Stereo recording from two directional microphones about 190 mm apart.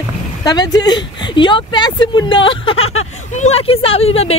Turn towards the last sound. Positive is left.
turn(degrees=30)  # may be behind; listen again after turning